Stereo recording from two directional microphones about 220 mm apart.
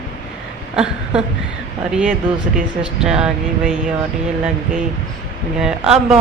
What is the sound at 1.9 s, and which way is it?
A woman's voice, 5° right (ahead or behind).